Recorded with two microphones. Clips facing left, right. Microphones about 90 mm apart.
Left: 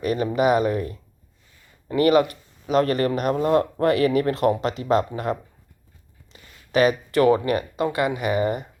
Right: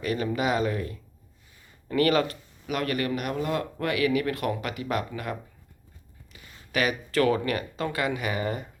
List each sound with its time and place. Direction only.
0.0 s speech: 25° left (ahead or behind)
2.6 s speech: 30° left (ahead or behind)
6.3 s a sound: 25° left (ahead or behind)
6.7 s speech: 25° left (ahead or behind)